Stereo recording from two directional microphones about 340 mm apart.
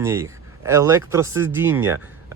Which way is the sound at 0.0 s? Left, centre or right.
Centre.